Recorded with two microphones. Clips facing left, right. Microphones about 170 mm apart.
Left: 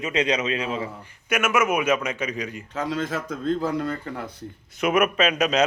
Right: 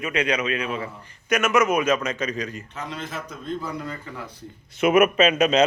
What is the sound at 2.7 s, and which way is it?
Speech, 90° left.